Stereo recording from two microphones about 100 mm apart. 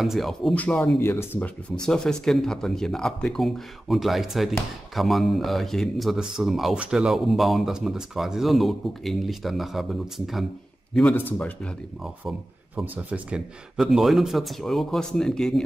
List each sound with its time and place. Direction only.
0.0 s speech: centre (ahead or behind)
0.6 s speech: 15° left (ahead or behind)
1.9 s speech: 5° left (ahead or behind)
11.1 s speech: 15° left (ahead or behind)
12.0 s speech: centre (ahead or behind)
12.8 s speech: 15° right (ahead or behind); by 15.6 s 5° left (ahead or behind)